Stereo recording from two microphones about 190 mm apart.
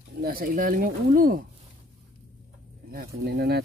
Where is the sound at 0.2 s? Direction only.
50° right (ahead or behind).